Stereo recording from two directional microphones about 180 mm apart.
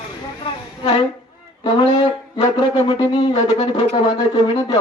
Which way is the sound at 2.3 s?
25° left (ahead or behind).